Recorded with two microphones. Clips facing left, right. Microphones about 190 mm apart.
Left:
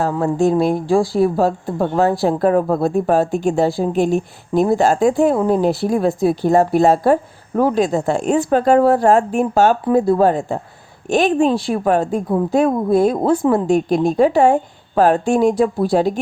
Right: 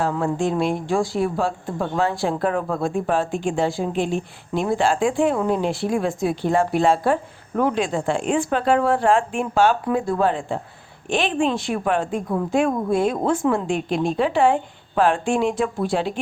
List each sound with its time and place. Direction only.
0.0 s speech: 40° left (ahead or behind)